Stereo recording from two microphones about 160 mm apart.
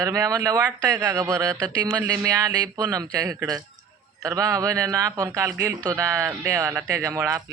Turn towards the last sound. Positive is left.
turn(degrees=-20)  # may be behind; listen again after turning